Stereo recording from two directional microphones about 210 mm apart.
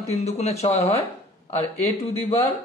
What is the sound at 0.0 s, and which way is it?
A man's voice, 30° left (ahead or behind).